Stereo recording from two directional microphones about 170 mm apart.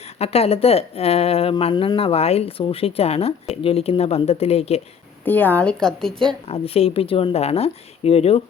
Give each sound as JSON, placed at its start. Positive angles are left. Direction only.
{"t": 0.2, "sound": "speech", "side_deg": 35}
{"t": 5.2, "sound": "a woman's voice", "side_deg": 10}
{"t": 6.5, "sound": "speech", "side_deg": 35}